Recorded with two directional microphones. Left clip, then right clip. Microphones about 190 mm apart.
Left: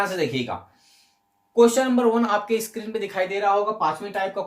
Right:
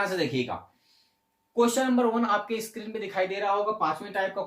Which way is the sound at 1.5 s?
30° left (ahead or behind).